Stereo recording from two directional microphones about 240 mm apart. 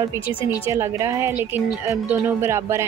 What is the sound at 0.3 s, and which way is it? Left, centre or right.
Speech, left.